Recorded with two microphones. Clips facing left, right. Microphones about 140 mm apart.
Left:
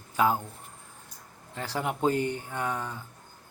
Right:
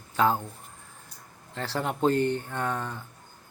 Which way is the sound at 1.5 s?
10° left (ahead or behind).